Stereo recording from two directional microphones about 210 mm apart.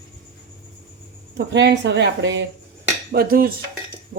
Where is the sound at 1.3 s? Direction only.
55° right (ahead or behind).